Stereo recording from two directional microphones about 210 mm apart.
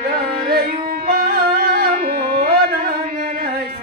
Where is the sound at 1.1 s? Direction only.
50° right (ahead or behind).